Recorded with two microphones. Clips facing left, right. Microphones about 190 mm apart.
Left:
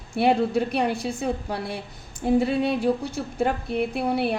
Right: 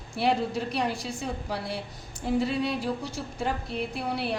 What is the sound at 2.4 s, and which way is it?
A woman's voice, 55° left (ahead or behind).